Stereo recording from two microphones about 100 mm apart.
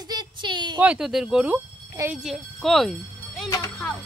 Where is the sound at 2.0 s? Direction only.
35° right (ahead or behind).